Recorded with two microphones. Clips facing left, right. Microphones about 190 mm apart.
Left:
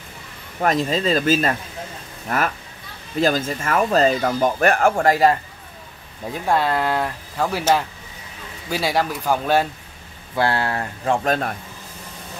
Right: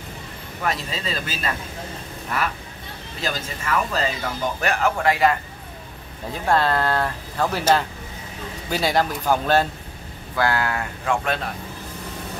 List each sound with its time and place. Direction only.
0.6 s speech: 45° left (ahead or behind)
3.2 s speech: 50° left (ahead or behind)
6.5 s speech: 10° left (ahead or behind)
10.3 s speech: 30° left (ahead or behind)